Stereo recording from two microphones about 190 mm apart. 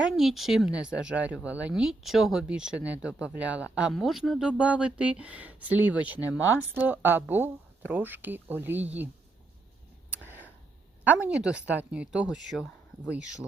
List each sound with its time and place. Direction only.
0.0 s speech: centre (ahead or behind)
10.2 s a sound: 10° right (ahead or behind)
11.0 s speech: 10° right (ahead or behind)